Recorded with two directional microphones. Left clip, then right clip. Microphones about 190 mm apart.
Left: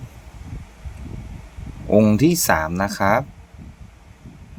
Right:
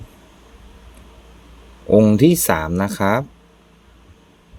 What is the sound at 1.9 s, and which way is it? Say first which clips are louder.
Speech: right 3 dB; 10° right (ahead or behind).